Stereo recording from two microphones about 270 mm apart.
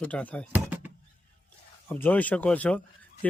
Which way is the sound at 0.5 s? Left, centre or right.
Centre.